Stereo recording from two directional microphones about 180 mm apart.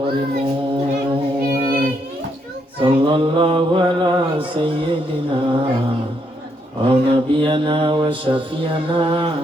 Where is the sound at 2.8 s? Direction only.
25° right (ahead or behind).